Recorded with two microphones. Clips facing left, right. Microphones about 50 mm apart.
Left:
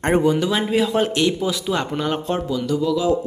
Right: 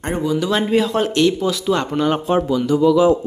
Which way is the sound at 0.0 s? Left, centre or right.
Left.